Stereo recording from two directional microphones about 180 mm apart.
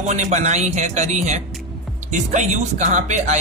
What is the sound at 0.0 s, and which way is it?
Speech, 40° right (ahead or behind).